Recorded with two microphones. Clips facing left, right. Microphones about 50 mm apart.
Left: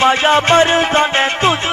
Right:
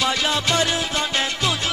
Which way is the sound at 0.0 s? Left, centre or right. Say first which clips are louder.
Left 10 dB; left.